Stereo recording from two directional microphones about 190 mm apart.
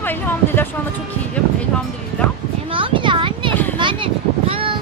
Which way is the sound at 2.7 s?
25° right (ahead or behind).